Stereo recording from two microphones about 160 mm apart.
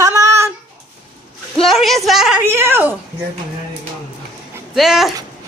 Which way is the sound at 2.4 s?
15° right (ahead or behind).